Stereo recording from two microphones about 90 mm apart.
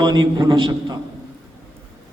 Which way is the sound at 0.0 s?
45° right (ahead or behind).